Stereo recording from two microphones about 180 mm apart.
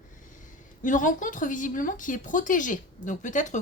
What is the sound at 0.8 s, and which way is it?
A woman's voice, 45° left (ahead or behind).